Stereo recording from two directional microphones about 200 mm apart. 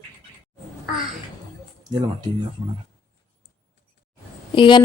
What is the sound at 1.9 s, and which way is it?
Speech, 20° right (ahead or behind).